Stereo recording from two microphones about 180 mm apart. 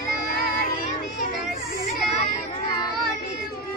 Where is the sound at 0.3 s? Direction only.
50° left (ahead or behind).